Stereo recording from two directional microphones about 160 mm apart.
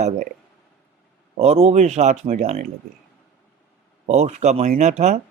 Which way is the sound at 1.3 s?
40° right (ahead or behind).